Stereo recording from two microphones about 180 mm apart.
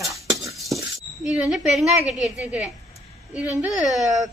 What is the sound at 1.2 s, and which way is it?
A woman's voice, 5° right (ahead or behind).